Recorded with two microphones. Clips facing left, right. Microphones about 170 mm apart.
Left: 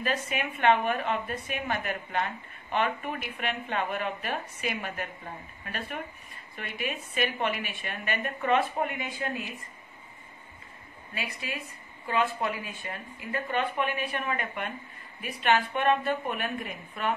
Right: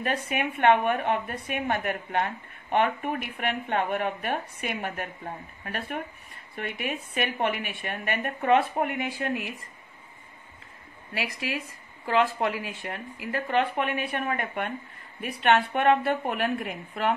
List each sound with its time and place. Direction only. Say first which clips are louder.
0.0 s a woman's voice: right 2 dB; 60° right (ahead or behind)
6.5 s a woman's voice: right 3 dB; 60° right (ahead or behind)
11.1 s a woman's voice: right 5 dB; 80° right